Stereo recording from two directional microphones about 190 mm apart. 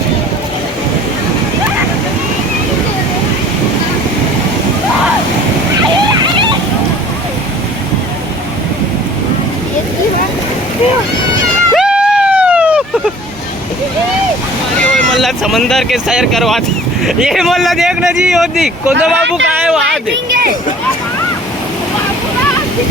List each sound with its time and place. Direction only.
11.7 s run: 5° right (ahead or behind)
14.8 s vehicle: centre (ahead or behind)
17.1 s speech: centre (ahead or behind)